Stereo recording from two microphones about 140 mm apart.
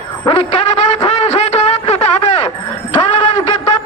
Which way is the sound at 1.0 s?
50° left (ahead or behind).